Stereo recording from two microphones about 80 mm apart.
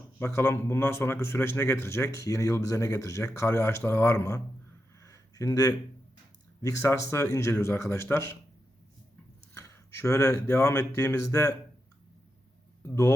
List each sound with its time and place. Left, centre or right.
0.2 s speech: left
4.9 s a sound: left
6.6 s speech: left
9.6 s speech: left
12.8 s speech: left